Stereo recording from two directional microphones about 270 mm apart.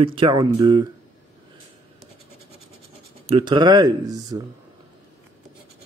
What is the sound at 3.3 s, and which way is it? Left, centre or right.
Speech, centre.